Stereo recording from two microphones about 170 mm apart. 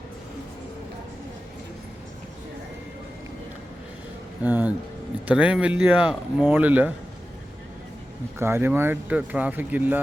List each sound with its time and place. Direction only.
4.4 s speech: 10° right (ahead or behind)
8.4 s speech: 15° right (ahead or behind)